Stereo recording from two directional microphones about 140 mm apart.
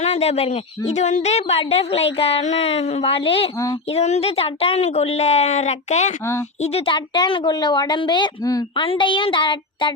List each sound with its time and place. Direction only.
0.0 s speech: 50° left (ahead or behind)
0.9 s a woman's voice: 55° left (ahead or behind)
3.0 s a woman's voice: 40° left (ahead or behind)